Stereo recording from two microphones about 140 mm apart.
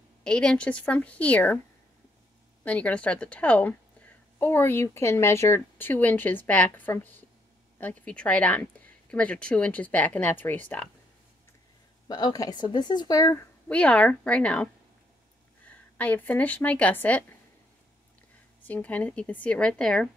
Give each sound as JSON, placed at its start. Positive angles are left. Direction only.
{"t": 0.2, "sound": "a woman's voice", "side_deg": 5}
{"t": 2.6, "sound": "a woman's voice", "side_deg": 10}
{"t": 12.1, "sound": "a woman's voice", "side_deg": 30}
{"t": 13.7, "sound": "a woman's voice", "side_deg": 10}
{"t": 16.0, "sound": "a woman's voice", "side_deg": 10}
{"t": 18.7, "sound": "a woman's voice", "side_deg": 10}